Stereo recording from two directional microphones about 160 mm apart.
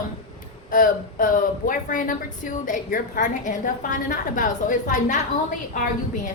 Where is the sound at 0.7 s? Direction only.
60° left (ahead or behind).